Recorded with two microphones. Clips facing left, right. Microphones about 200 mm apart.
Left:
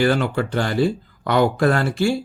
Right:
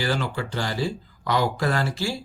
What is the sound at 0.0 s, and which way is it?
Speech, 60° left (ahead or behind).